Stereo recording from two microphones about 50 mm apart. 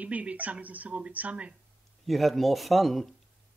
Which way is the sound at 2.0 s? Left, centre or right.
Centre.